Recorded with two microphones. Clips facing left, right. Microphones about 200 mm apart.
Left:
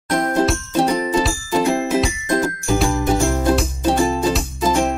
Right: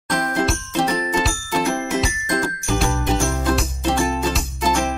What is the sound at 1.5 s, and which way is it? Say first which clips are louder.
Music: left 4 dB; 20° left (ahead or behind).